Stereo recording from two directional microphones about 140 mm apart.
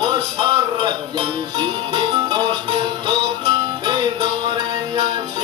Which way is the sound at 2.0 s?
35° right (ahead or behind).